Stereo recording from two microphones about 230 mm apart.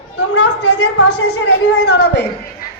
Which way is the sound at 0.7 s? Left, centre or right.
Left.